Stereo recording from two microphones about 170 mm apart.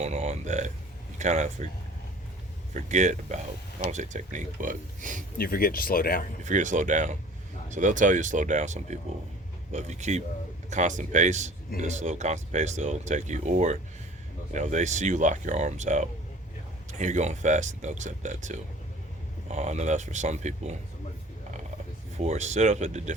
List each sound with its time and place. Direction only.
0.0 s a sound: 40° right (ahead or behind)
1.2 s speech: 45° right (ahead or behind)
2.7 s speech: 45° right (ahead or behind)
5.4 s speech: 60° left (ahead or behind)
6.4 s speech: 45° right (ahead or behind)
22.2 s speech: 40° right (ahead or behind)